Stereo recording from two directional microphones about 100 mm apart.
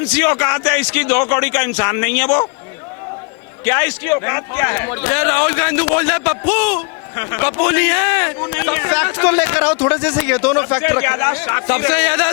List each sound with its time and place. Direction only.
0.1 s a man's voice: 25° left (ahead or behind)
3.6 s a man's voice: 25° left (ahead or behind)